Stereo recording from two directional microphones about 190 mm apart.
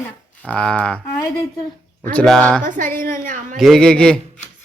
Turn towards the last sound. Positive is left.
turn(degrees=5)  # may be behind; listen again after turning